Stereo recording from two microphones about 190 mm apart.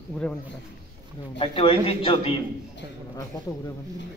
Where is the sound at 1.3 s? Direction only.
25° left (ahead or behind).